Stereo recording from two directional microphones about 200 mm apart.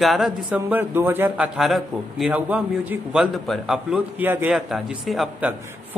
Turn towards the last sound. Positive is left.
turn(degrees=-5)  # may be behind; listen again after turning